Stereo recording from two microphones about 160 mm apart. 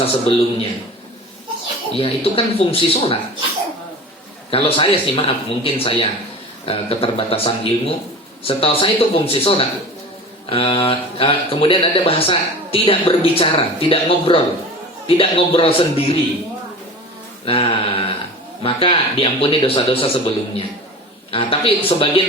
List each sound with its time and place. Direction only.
0.0 s speech: 35° left (ahead or behind)
1.9 s speech: 35° left (ahead or behind)
4.5 s speech: 35° left (ahead or behind)
17.4 s speech: 35° left (ahead or behind)